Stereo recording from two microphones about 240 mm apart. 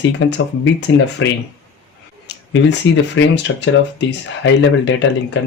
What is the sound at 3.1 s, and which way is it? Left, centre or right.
Speech, left.